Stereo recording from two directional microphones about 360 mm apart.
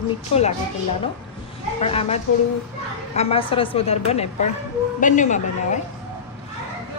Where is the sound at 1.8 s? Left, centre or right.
Centre.